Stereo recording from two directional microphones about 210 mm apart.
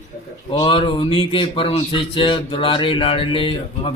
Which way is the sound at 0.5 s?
20° left (ahead or behind).